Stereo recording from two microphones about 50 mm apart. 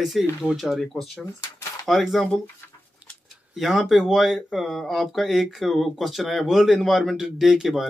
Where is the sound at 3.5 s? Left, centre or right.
Centre.